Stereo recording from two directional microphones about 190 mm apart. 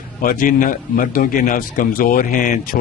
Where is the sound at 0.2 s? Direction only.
45° left (ahead or behind).